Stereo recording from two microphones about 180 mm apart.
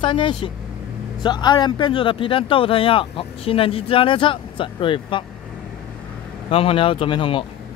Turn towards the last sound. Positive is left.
turn(degrees=30)  # may be behind; listen again after turning